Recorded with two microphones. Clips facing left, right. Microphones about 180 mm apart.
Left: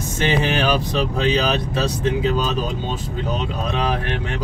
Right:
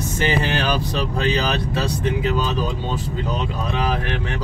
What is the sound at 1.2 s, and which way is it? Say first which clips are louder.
Speech: left 1 dB; 20° left (ahead or behind).